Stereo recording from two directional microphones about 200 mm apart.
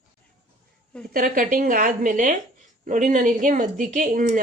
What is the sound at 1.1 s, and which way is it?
A woman's voice, 45° right (ahead or behind).